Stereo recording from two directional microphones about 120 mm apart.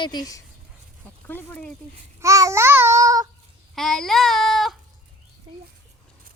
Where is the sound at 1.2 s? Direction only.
15° left (ahead or behind).